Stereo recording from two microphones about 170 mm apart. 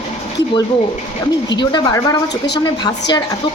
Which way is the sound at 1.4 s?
25° left (ahead or behind).